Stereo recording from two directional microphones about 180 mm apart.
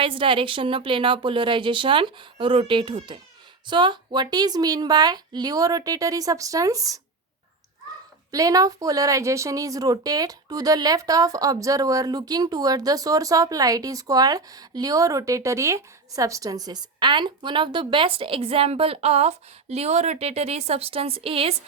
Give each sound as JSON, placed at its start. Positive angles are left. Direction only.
{"t": 0.0, "sound": "speech", "side_deg": -30}
{"t": 8.3, "sound": "speech", "side_deg": -20}